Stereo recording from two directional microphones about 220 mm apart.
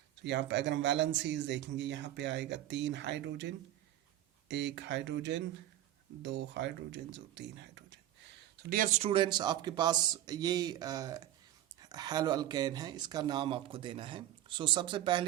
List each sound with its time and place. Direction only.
0.3 s a man's voice: 50° right (ahead or behind)
8.5 s speech: 40° right (ahead or behind); by 15.2 s 20° right (ahead or behind)